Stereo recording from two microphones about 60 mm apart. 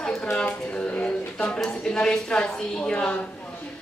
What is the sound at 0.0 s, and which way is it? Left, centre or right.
Speech, centre.